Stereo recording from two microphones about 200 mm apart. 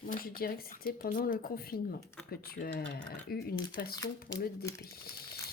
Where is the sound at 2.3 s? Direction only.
50° left (ahead or behind).